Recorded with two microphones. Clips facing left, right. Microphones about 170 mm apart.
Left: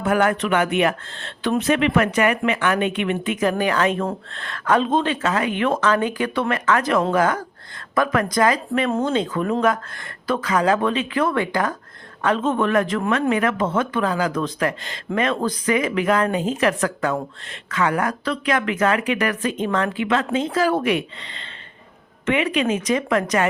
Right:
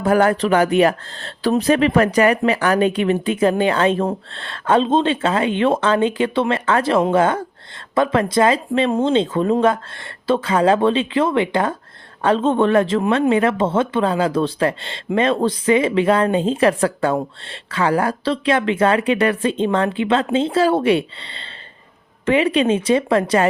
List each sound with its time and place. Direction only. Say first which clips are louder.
0.0 s speech: right 4 dB; 35° right (ahead or behind)